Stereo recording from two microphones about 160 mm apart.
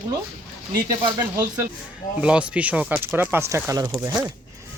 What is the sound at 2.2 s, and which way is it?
Speech, 5° right (ahead or behind).